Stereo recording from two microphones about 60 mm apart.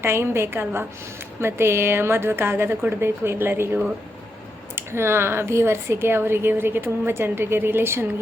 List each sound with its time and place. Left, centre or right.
0.0 s a woman's voice: right